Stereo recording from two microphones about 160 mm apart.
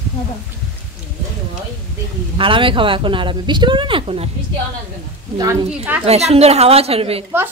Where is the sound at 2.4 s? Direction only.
30° right (ahead or behind).